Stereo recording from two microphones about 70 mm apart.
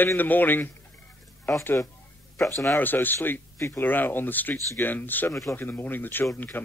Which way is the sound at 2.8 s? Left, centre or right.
Left.